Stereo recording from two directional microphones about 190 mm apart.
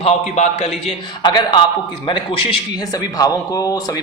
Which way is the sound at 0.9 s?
25° left (ahead or behind).